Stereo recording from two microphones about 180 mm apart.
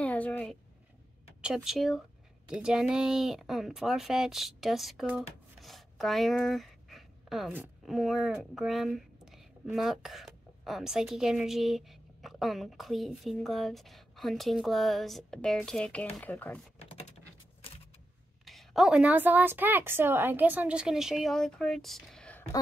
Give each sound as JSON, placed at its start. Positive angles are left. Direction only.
{"t": 0.0, "sound": "a sound", "side_deg": 10}
{"t": 1.4, "sound": "a woman's voice", "side_deg": -5}
{"t": 16.7, "sound": "typing", "side_deg": 35}
{"t": 18.4, "sound": "a woman's voice", "side_deg": 0}